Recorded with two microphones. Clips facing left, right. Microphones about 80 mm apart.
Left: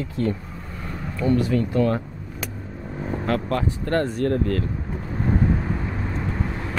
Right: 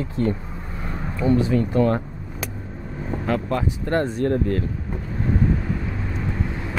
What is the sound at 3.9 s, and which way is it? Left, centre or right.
Speech, right.